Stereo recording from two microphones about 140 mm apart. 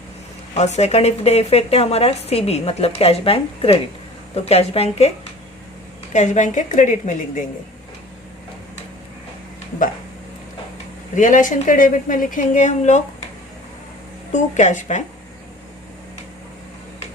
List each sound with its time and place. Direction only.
0.5 s a woman's voice: 50° left (ahead or behind)
11.1 s a woman's voice: 65° left (ahead or behind)
14.3 s a woman's voice: 60° left (ahead or behind)